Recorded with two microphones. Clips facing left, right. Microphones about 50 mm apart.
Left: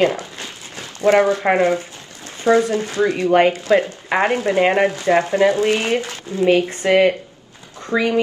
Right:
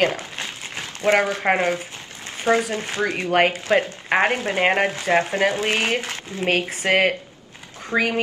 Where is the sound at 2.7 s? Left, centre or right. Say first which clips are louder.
Left 5 dB; right.